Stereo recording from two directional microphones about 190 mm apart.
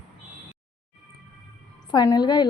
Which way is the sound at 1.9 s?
20° left (ahead or behind).